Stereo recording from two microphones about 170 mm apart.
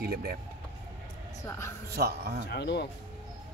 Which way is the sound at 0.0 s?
65° right (ahead or behind).